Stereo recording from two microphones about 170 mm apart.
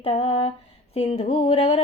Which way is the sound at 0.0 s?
35° left (ahead or behind).